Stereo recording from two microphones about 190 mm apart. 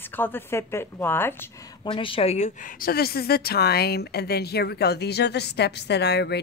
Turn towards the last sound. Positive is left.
turn(degrees=60)  # may be behind; listen again after turning